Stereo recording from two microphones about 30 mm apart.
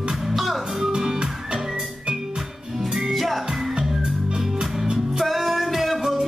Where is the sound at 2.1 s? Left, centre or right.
Right.